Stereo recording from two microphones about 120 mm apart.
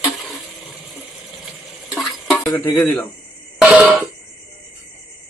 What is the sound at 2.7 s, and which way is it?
Speech, 15° left (ahead or behind).